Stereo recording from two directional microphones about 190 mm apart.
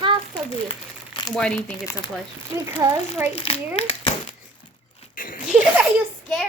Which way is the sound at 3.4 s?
30° left (ahead or behind).